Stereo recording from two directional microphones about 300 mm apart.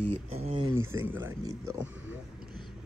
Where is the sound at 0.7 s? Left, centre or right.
Centre.